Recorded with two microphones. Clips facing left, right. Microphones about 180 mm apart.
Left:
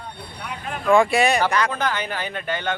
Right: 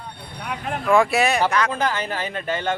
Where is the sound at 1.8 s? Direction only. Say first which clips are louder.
Right 1 dB; 30° right (ahead or behind).